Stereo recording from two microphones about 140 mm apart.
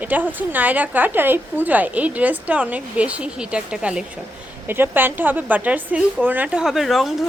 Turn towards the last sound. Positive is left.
turn(degrees=0)  # may be behind; listen again after turning